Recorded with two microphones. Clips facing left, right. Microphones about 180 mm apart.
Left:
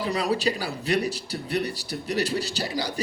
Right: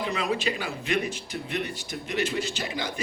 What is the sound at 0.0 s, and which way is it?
A man's voice, 35° left (ahead or behind).